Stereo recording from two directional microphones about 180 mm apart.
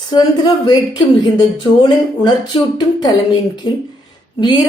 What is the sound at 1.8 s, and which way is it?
Speech, 25° left (ahead or behind).